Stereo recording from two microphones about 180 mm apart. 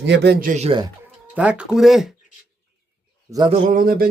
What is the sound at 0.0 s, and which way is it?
Speech, 70° right (ahead or behind).